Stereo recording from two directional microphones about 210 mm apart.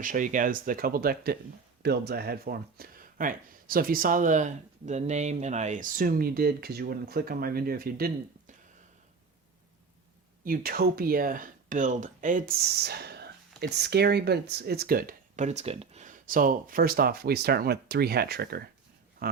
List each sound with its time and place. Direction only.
0.0 s speech: 40° right (ahead or behind)
10.4 s speech: 45° right (ahead or behind)